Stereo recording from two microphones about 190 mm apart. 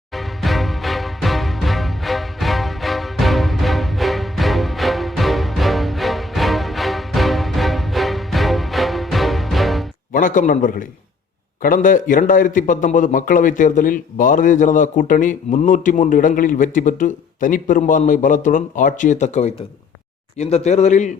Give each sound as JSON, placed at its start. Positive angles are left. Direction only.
{"t": 0.1, "sound": "music", "side_deg": 0}
{"t": 10.1, "sound": "a man's voice", "side_deg": 45}